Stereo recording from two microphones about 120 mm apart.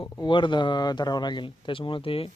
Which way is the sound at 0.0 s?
45° left (ahead or behind).